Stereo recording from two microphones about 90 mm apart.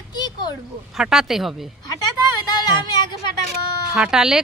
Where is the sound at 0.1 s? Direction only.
50° left (ahead or behind).